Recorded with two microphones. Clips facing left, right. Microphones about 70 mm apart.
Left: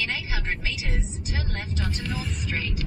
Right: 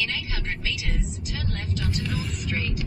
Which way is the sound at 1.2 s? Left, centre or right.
Left.